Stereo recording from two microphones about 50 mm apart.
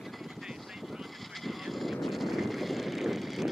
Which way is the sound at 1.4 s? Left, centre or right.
Centre.